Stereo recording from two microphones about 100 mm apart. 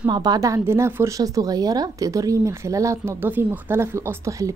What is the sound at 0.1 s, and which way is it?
Speech, 40° right (ahead or behind).